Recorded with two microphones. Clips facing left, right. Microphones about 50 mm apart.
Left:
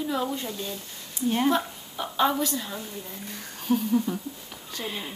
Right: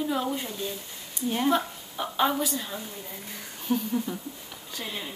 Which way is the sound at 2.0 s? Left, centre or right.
Centre.